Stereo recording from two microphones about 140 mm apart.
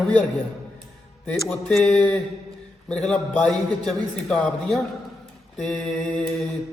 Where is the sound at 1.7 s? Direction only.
5° left (ahead or behind).